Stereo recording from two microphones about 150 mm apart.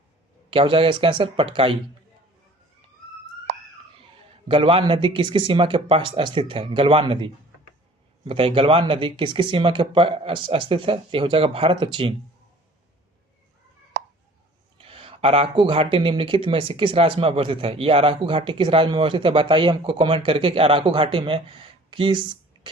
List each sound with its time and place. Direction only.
0.5 s speech: 35° right (ahead or behind)
4.4 s speech: 35° right (ahead or behind)
14.8 s speech: 40° right (ahead or behind)